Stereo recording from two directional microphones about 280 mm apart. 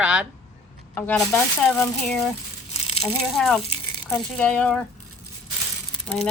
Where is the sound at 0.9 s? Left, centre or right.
Centre.